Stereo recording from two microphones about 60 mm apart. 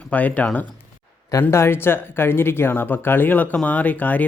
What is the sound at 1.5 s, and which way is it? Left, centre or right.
Speech, left.